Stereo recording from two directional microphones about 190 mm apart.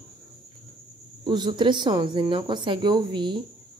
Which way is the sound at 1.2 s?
25° right (ahead or behind).